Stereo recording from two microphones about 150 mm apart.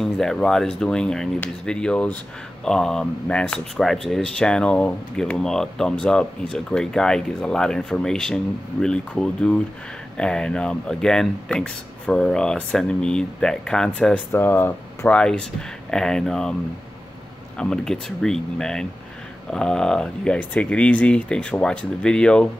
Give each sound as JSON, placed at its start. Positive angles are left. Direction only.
{"t": 0.0, "sound": "speech", "side_deg": 5}
{"t": 17.6, "sound": "speech", "side_deg": 5}